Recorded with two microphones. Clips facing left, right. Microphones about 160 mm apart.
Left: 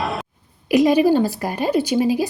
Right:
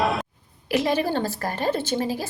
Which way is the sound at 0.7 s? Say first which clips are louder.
Left 8 dB; 15° left (ahead or behind).